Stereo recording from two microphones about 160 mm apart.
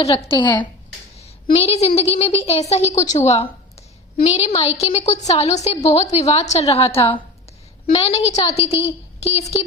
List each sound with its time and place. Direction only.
0.3 s speech: 30° left (ahead or behind)
1.5 s a woman's voice: 40° left (ahead or behind)